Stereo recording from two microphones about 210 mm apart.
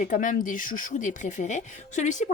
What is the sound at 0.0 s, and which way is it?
Speech, 40° left (ahead or behind).